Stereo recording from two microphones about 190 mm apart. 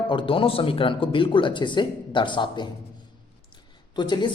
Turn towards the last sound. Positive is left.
turn(degrees=25)  # may be behind; listen again after turning